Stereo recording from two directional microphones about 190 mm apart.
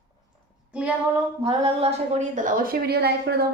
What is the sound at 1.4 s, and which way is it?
A woman's voice, 30° right (ahead or behind).